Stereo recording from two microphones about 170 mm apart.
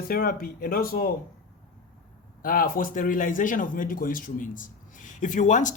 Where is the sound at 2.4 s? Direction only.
55° left (ahead or behind).